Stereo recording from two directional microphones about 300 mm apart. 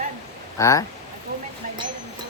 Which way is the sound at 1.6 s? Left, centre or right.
Right.